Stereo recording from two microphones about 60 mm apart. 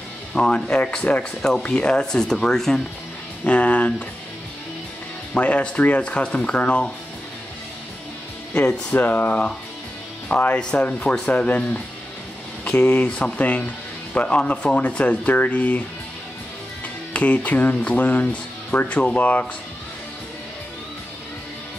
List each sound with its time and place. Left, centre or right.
0.3 s speech: centre
3.4 s speech: left
5.3 s speech: left
8.9 s speech: left
17.1 s speech: left